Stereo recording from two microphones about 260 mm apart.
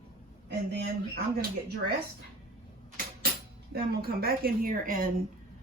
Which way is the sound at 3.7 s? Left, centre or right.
Right.